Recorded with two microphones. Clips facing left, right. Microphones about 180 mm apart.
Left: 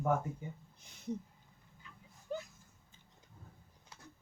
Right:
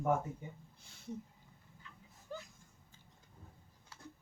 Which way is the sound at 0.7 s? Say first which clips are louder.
Left 7 dB; 20° left (ahead or behind).